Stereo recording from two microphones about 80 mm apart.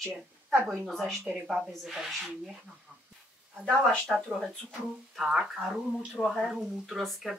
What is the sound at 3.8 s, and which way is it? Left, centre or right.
Speech, centre.